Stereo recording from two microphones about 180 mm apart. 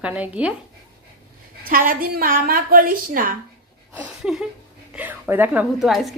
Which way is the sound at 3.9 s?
5° right (ahead or behind).